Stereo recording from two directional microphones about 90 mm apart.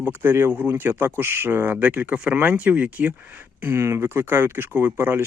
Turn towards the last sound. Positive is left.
turn(degrees=-25)  # may be behind; listen again after turning